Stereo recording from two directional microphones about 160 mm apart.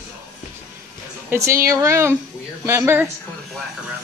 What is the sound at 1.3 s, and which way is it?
Speech, 15° right (ahead or behind).